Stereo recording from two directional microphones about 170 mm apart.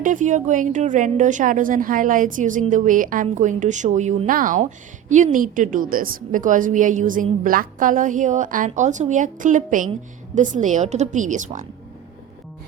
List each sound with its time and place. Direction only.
0.0 s a woman's voice: 50° right (ahead or behind)